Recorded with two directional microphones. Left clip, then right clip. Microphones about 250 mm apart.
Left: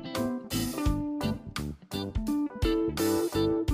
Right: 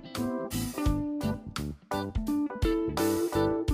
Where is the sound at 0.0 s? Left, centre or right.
Centre.